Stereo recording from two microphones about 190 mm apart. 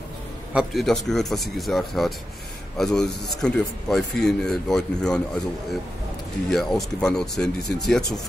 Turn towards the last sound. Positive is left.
turn(degrees=0)  # may be behind; listen again after turning